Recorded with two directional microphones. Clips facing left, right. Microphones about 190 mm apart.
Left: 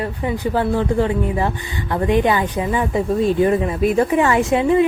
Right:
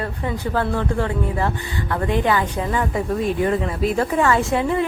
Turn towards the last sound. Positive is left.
turn(degrees=20)  # may be behind; listen again after turning